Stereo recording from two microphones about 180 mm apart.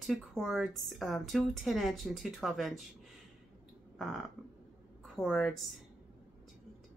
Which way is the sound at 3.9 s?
Centre (ahead or behind).